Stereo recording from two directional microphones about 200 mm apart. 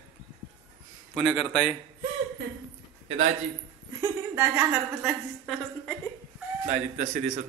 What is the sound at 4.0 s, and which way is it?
A woman's voice, 10° right (ahead or behind).